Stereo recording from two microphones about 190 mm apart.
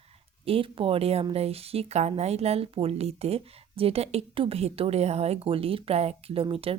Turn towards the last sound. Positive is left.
turn(degrees=-30)  # may be behind; listen again after turning